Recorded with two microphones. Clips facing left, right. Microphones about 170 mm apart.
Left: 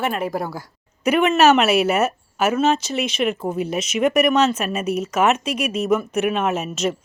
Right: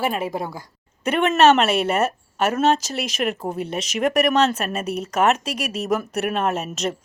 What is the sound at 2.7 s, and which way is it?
Speech, 40° right (ahead or behind).